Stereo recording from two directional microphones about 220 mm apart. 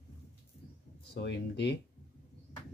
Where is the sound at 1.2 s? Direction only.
50° left (ahead or behind).